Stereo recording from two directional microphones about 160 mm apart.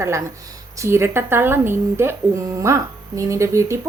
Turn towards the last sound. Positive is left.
turn(degrees=-20)  # may be behind; listen again after turning